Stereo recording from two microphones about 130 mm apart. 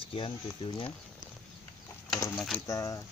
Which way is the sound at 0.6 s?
40° left (ahead or behind).